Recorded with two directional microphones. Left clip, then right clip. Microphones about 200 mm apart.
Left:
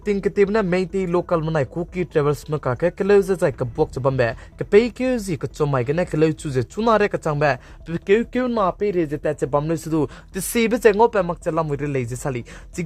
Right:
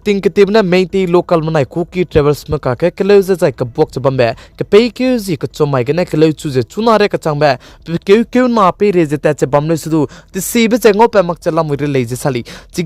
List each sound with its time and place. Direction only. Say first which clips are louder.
0.0 s speech: right 8 dB; 45° right (ahead or behind)